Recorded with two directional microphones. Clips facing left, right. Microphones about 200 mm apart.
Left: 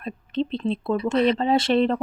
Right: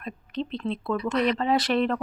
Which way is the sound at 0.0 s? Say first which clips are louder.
Left 5 dB; 30° left (ahead or behind).